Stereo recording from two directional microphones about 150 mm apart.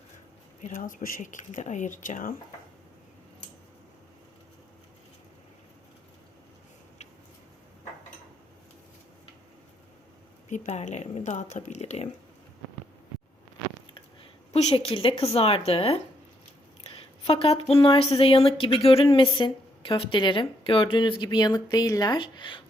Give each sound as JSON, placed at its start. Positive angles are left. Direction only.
{"t": 0.7, "sound": "speech", "side_deg": 65}
{"t": 10.5, "sound": "speech", "side_deg": 50}
{"t": 13.9, "sound": "speech", "side_deg": 40}
{"t": 17.2, "sound": "speech", "side_deg": 40}